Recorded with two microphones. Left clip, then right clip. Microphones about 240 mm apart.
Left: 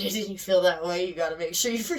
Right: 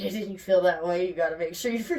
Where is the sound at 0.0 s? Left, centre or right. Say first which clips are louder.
Left 2 dB; left.